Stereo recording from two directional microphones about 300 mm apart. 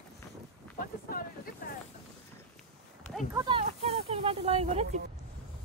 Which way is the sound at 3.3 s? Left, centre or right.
Centre.